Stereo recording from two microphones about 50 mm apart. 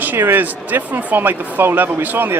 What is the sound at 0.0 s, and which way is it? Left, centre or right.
A man's voice, right.